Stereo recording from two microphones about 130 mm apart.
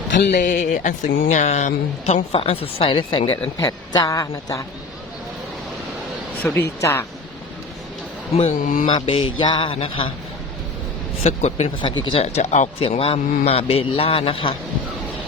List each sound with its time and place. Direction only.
0.1 s speech: 80° left; by 2.2 s 60° left (ahead or behind)
2.3 s a man's voice: 45° left (ahead or behind)
3.6 s a woman's voice: 30° left (ahead or behind)
6.4 s speech: 15° left (ahead or behind)
8.4 s speech: 65° left (ahead or behind)
8.9 s speech: 40° left (ahead or behind)
11.2 s speech: 55° left (ahead or behind)
11.8 s a man's voice: 40° left (ahead or behind)